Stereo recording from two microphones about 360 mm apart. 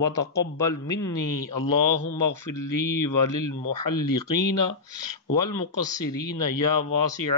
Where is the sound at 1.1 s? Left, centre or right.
Left.